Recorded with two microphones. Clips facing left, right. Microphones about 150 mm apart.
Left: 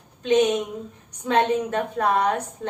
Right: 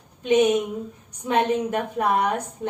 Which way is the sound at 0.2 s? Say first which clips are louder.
Right 1 dB; 10° right (ahead or behind).